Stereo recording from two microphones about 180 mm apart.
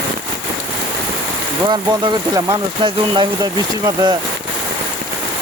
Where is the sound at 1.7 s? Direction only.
20° right (ahead or behind).